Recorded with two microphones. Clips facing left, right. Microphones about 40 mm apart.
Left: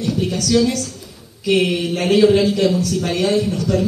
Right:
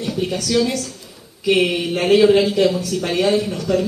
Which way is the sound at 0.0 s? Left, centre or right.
Centre.